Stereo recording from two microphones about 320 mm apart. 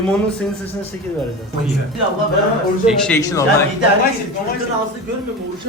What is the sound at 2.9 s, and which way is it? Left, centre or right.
Speech, centre.